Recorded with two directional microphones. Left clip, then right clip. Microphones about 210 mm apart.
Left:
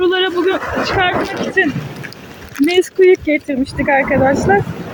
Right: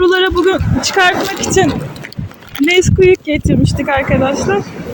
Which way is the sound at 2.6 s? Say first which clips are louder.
Right 2 dB; centre (ahead or behind).